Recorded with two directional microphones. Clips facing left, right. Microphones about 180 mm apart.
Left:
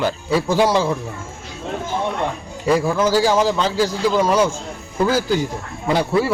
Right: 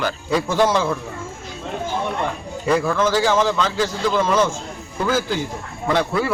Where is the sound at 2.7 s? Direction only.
15° left (ahead or behind).